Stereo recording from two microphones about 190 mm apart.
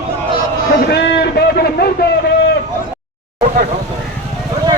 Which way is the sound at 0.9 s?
60° left (ahead or behind).